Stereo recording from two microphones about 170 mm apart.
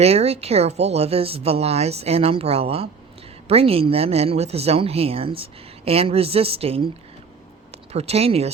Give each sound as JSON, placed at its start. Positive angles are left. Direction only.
{"t": 0.0, "sound": "speech", "side_deg": -40}
{"t": 7.9, "sound": "speech", "side_deg": -35}